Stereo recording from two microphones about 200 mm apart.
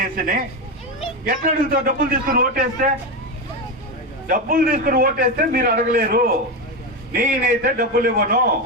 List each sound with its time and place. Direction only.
0.0 s a man's voice: 45° right (ahead or behind)
4.3 s a man's voice: 45° right (ahead or behind)